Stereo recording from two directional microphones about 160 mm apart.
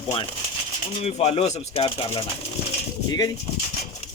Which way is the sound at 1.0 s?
40° left (ahead or behind).